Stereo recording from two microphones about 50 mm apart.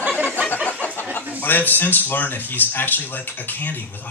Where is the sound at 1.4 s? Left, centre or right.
Left.